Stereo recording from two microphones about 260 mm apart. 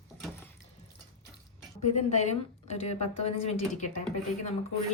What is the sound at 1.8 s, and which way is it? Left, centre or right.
A woman's voice, left.